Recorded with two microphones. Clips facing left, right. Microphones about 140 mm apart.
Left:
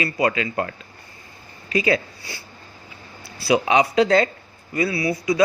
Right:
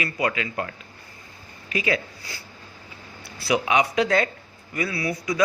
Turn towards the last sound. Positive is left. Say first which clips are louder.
# left 5 dB
turn(degrees=30)  # may be behind; listen again after turning